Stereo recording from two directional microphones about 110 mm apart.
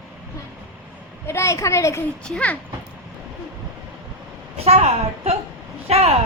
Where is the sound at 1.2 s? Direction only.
25° left (ahead or behind).